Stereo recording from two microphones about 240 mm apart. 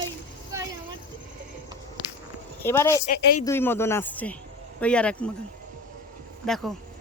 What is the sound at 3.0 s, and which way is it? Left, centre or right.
Speech, left.